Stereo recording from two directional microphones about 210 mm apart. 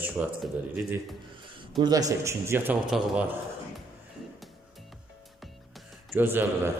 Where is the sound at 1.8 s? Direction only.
20° right (ahead or behind).